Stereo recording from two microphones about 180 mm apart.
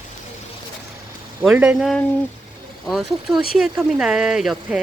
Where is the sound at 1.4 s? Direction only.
5° right (ahead or behind).